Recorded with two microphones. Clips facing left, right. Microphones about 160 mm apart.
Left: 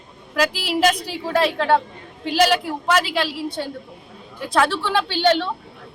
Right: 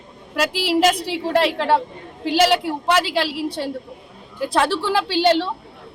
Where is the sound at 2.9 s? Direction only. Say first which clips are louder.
Right 1 dB; 30° right (ahead or behind).